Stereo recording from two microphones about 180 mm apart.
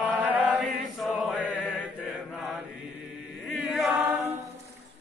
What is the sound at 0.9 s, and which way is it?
Chant, 5° left (ahead or behind).